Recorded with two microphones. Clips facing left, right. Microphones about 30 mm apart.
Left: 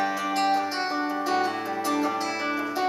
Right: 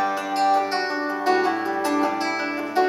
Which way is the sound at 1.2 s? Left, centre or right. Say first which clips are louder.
Right 9 dB; right.